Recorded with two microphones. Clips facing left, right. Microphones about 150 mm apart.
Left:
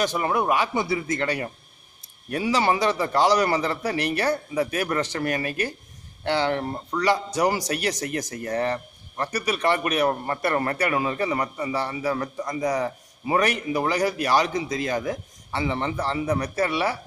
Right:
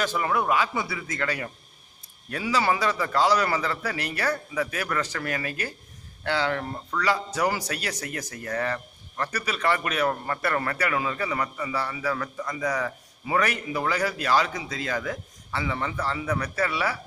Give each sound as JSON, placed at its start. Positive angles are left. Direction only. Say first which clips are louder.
{"t": 0.0, "sound": "a man's voice", "louder": "left 2 dB", "side_deg": 20}
{"t": 8.2, "sound": "speech", "louder": "left 5 dB", "side_deg": 40}
{"t": 8.5, "sound": "a man's voice", "louder": "left 3 dB", "side_deg": 25}